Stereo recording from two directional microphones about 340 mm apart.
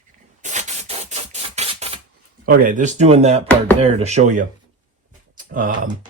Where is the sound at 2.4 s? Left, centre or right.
Right.